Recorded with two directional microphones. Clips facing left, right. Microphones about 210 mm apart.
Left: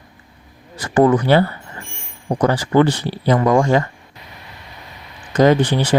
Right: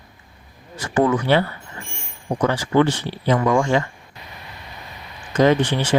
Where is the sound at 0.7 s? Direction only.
35° left (ahead or behind).